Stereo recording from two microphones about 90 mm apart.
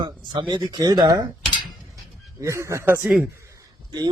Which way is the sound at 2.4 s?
35° right (ahead or behind).